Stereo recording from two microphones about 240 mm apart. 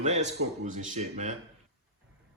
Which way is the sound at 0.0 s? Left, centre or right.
Right.